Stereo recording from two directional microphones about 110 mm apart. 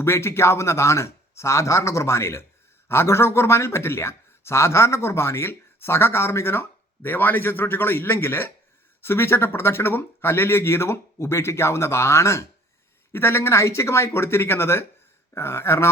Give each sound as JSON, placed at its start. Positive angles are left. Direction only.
{"t": 0.0, "sound": "speech", "side_deg": 25}